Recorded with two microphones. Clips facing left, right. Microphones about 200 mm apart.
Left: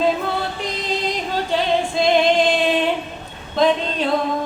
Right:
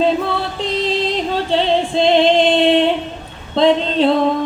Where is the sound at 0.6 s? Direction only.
30° right (ahead or behind).